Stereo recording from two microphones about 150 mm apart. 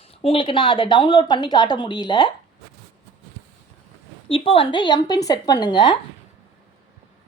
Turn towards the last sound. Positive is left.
turn(degrees=30)  # may be behind; listen again after turning